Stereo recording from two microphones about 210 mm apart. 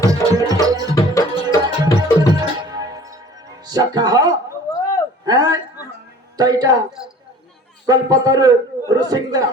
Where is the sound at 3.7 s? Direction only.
20° right (ahead or behind).